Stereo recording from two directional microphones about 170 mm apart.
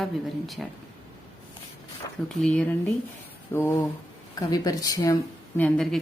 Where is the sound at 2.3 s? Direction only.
5° left (ahead or behind).